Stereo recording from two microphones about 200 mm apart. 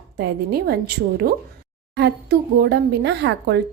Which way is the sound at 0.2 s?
55° right (ahead or behind).